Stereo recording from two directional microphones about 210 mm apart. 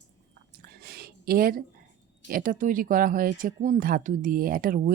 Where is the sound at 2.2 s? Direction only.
40° right (ahead or behind).